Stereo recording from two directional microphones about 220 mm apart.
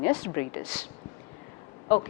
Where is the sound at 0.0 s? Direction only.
15° left (ahead or behind).